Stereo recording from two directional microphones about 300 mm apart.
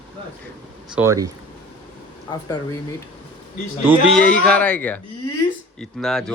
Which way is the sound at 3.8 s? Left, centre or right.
Centre.